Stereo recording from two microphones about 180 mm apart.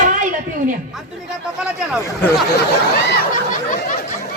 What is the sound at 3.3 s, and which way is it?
Snicker, 45° left (ahead or behind).